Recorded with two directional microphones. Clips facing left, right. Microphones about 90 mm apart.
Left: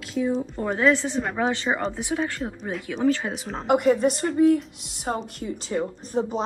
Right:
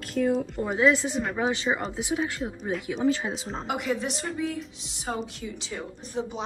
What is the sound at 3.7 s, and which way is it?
A woman's voice, 45° left (ahead or behind).